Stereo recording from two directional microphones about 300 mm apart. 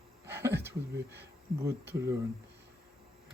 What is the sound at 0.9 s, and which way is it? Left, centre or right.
Speech, right.